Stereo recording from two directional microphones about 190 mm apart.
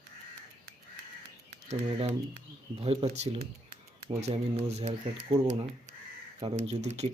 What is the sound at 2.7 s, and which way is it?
Speech, 30° right (ahead or behind).